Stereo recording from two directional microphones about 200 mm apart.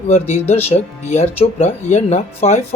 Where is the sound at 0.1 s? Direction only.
35° left (ahead or behind).